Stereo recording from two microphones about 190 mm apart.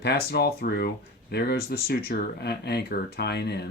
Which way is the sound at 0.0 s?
60° left (ahead or behind).